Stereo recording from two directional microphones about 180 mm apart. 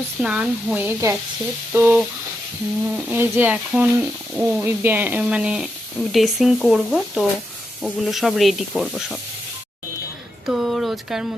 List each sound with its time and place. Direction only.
0.2 s speech: 5° right (ahead or behind)
10.4 s speech: 5° right (ahead or behind)